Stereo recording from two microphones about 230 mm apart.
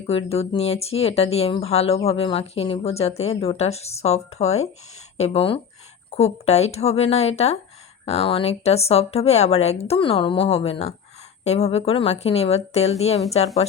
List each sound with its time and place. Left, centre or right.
0.1 s speech: left